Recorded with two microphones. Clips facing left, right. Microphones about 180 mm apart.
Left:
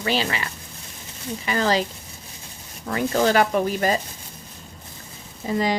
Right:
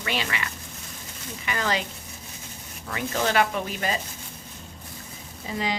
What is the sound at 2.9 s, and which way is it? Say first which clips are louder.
Speech: left 6 dB; 40° left (ahead or behind).